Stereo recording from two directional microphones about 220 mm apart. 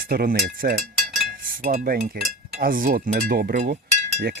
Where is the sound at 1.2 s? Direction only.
40° right (ahead or behind).